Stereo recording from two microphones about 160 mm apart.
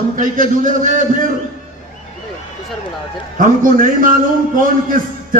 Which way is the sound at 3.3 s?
60° right (ahead or behind).